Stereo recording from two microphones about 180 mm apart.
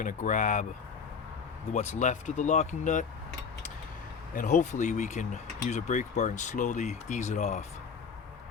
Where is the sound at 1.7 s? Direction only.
40° left (ahead or behind).